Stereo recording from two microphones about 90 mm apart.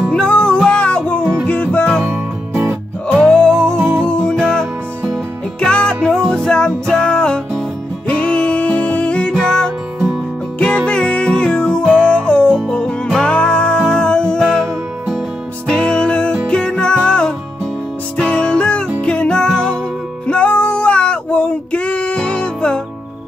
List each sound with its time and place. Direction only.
0.1 s music: 10° left (ahead or behind)
2.0 s music: 25° right (ahead or behind)
3.1 s music: 10° left (ahead or behind)
10.9 s music: 10° left (ahead or behind)
15.7 s music: 10° left (ahead or behind)